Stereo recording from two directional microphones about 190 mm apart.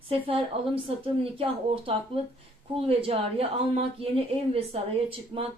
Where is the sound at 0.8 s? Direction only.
30° right (ahead or behind).